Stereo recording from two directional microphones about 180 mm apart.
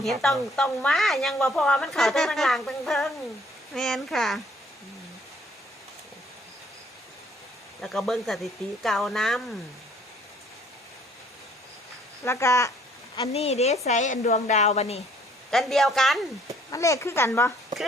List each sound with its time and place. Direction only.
0.0 s speech: centre (ahead or behind)
7.8 s speech: centre (ahead or behind)
12.2 s speech: 15° left (ahead or behind)
13.2 s a woman's voice: 35° left (ahead or behind)
15.4 s speech: centre (ahead or behind)
16.7 s speech: 15° left (ahead or behind)